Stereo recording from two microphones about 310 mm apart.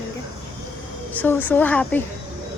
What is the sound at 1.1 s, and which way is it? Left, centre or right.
Speech, centre.